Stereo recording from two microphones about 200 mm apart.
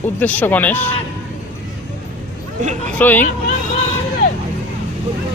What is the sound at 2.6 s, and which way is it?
Speech, 35° right (ahead or behind).